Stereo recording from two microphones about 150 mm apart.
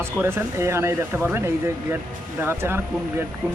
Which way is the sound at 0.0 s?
15° right (ahead or behind).